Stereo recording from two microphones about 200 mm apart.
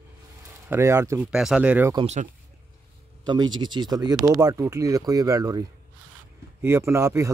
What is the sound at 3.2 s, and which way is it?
Speech, 20° right (ahead or behind).